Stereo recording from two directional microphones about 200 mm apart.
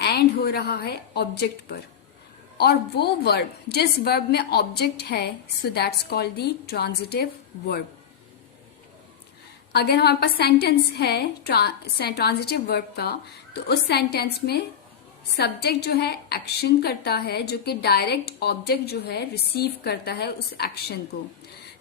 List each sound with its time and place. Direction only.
0.0 s a woman's voice: 50° left (ahead or behind)
9.7 s a woman's voice: 55° left (ahead or behind)